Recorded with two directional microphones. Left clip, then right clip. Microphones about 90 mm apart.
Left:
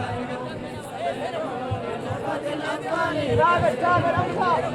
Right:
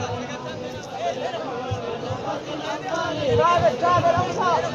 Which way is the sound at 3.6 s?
15° left (ahead or behind).